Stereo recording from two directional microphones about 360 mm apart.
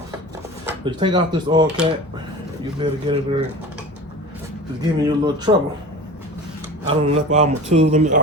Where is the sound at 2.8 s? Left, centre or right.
Centre.